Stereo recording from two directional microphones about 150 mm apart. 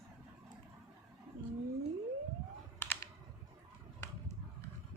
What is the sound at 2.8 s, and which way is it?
Computer keyboard, 15° left (ahead or behind).